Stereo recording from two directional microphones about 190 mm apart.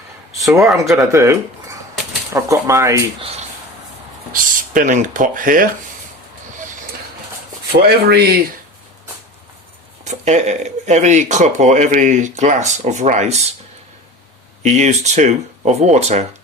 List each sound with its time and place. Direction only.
0.6 s speech: centre (ahead or behind)
1.1 s speech: 15° right (ahead or behind)
4.3 s speech: 45° right (ahead or behind)
7.8 s speech: 55° right (ahead or behind)
10.0 s speech: 40° right (ahead or behind)
14.6 s speech: 40° right (ahead or behind)